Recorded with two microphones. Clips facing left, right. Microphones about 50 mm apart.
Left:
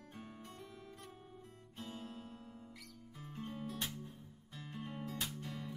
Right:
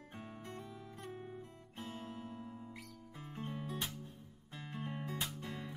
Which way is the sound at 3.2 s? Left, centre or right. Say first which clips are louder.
Right 1 dB; right.